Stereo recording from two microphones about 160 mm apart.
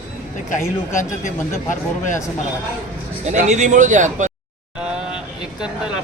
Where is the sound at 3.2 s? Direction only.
45° right (ahead or behind).